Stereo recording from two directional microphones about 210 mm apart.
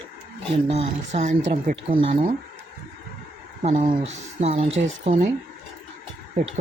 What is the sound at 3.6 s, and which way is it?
Speech, 35° right (ahead or behind).